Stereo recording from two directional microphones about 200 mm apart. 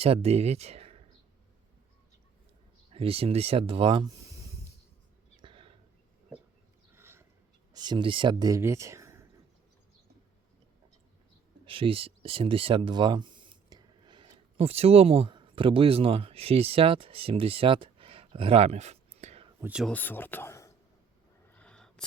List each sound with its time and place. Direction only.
0.0 s speech: 30° right (ahead or behind)
2.9 s speech: 30° right (ahead or behind)
5.4 s a sound: 25° right (ahead or behind)
6.9 s a sound: 10° right (ahead or behind)
7.7 s speech: 20° right (ahead or behind)
11.6 s speech: 25° right (ahead or behind)
19.6 s speech: 5° right (ahead or behind)
19.9 s speech: 10° left (ahead or behind)
21.5 s a sound: 5° left (ahead or behind)